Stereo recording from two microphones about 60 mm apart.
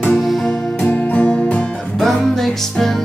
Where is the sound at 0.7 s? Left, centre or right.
Left.